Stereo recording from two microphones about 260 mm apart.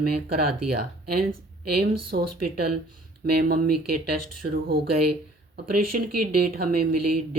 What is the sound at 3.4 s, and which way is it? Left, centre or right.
Speech, right.